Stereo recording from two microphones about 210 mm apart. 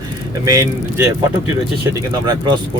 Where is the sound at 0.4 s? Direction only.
15° right (ahead or behind).